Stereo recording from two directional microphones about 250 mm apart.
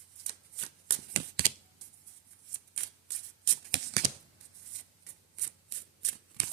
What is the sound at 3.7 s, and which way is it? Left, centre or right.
Shuffling cards, right.